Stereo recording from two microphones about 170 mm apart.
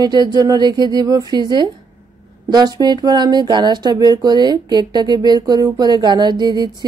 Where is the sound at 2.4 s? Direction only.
25° right (ahead or behind).